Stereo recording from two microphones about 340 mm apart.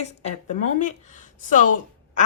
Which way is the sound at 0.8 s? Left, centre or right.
Left.